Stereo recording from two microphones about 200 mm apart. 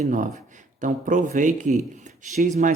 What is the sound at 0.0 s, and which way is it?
Speech, 35° right (ahead or behind).